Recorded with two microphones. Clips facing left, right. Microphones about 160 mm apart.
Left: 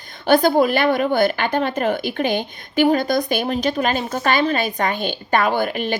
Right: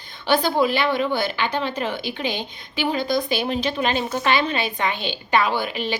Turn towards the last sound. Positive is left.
turn(degrees=50)  # may be behind; listen again after turning